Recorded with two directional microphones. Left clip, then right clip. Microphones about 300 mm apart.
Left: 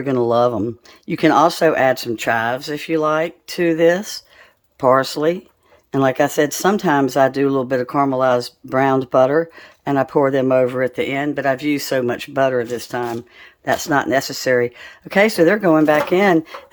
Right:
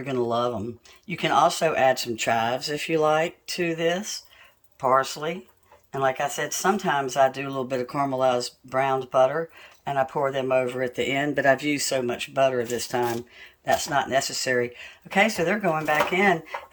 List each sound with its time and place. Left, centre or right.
0.0 s speech: centre